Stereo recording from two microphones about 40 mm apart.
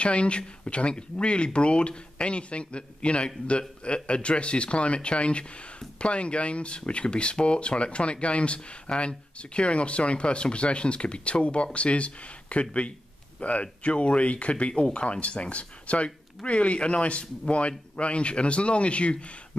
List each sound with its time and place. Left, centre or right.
0.0 s speech: left